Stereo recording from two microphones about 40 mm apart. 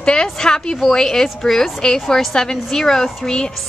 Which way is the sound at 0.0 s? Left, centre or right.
Centre.